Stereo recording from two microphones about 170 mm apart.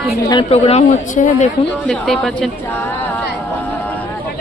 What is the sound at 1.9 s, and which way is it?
Speech, 5° left (ahead or behind).